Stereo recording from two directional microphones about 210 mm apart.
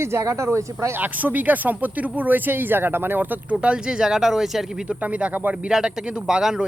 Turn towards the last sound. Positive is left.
turn(degrees=-5)  # may be behind; listen again after turning